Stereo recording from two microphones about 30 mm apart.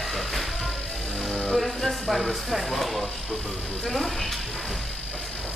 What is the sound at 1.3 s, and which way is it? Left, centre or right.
Speech, left.